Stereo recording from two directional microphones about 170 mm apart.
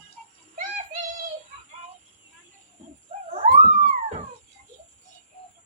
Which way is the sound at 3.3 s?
40° right (ahead or behind).